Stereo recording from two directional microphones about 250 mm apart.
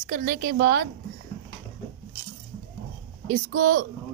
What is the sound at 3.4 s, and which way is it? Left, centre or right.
Speech, right.